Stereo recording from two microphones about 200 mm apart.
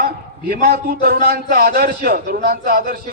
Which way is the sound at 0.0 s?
50° right (ahead or behind).